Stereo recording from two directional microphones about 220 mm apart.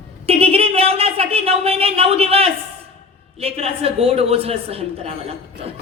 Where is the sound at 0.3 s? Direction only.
25° right (ahead or behind).